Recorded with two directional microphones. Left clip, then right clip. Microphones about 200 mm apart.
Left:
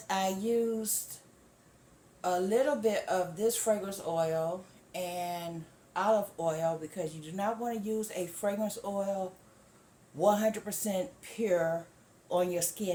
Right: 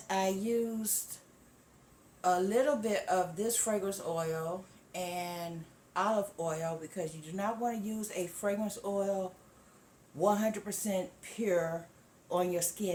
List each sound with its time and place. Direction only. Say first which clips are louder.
0.1 s a woman's voice: left 1 dB; 10° left (ahead or behind)
2.2 s a woman's voice: even; 5° left (ahead or behind)
10.2 s a woman's voice: left 3 dB; 10° left (ahead or behind)